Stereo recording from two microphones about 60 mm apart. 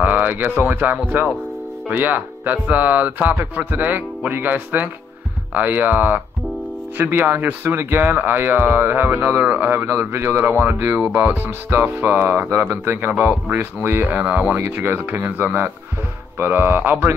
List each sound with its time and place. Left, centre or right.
0.0 s speech: right
11.8 s speech: right
14.0 s speech: right
14.6 s speech: right